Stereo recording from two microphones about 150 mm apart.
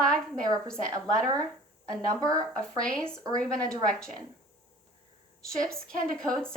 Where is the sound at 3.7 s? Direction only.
5° left (ahead or behind).